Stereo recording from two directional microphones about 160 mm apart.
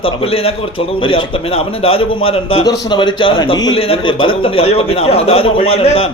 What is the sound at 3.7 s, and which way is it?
A man's voice, 35° left (ahead or behind).